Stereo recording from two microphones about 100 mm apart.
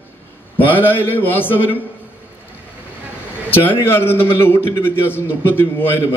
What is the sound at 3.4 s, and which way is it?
A man's voice, 20° left (ahead or behind).